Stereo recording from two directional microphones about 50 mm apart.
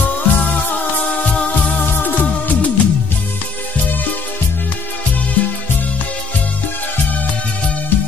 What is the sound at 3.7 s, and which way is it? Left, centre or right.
Music, left.